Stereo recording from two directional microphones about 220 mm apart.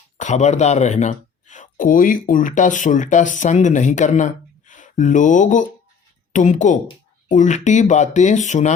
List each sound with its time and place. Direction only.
0.2 s speech: 30° left (ahead or behind)